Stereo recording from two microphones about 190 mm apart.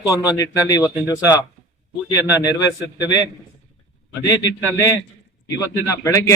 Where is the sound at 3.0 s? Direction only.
20° left (ahead or behind).